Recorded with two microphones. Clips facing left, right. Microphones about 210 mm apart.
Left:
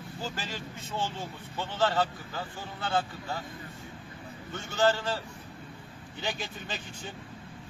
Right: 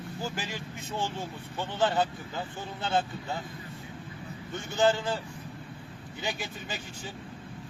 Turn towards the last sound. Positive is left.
turn(degrees=-10)  # may be behind; listen again after turning